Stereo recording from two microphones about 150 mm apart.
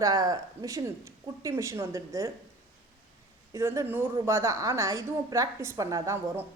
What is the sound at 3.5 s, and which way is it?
A woman's voice, 20° right (ahead or behind).